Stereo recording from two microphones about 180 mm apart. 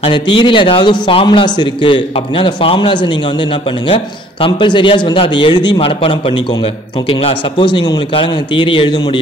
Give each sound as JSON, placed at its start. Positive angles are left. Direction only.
{"t": 0.0, "sound": "a man's voice", "side_deg": 30}